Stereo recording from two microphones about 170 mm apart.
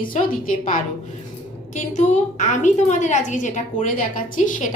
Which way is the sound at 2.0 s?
45° left (ahead or behind).